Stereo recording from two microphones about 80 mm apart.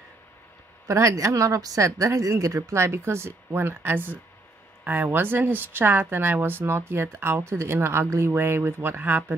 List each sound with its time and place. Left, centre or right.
0.8 s a woman's voice: right